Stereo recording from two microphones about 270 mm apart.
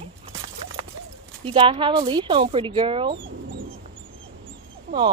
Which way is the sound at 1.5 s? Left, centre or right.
Centre.